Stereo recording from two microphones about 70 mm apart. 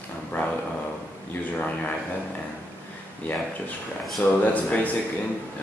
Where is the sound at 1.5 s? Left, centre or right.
Left.